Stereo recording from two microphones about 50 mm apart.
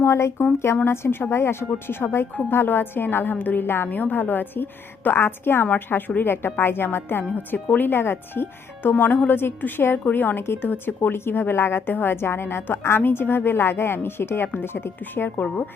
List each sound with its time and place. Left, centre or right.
0.0 s speech: left
0.9 s a woman's voice: left
3.8 s speech: left
13.0 s speech: left
15.4 s a woman's voice: left